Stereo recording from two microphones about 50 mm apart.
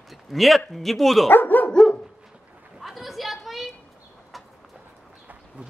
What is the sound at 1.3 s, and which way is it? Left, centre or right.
Speech, left.